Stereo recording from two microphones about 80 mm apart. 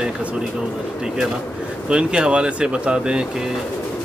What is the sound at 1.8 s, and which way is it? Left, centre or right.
Speech, centre.